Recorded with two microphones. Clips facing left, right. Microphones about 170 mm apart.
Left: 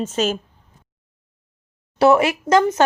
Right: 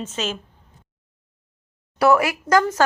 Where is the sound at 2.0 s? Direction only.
25° left (ahead or behind).